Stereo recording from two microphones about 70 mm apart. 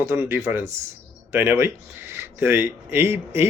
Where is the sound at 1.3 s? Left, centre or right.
Right.